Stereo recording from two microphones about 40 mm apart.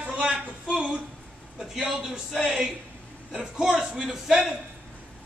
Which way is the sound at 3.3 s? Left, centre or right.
Centre.